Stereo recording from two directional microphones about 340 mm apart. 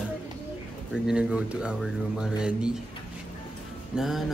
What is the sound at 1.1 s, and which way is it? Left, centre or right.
Speech, centre.